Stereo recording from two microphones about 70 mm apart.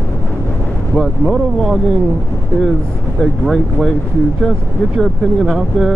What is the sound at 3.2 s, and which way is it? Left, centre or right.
Speech, centre.